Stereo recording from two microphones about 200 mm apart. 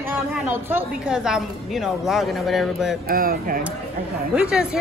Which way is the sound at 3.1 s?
45° right (ahead or behind).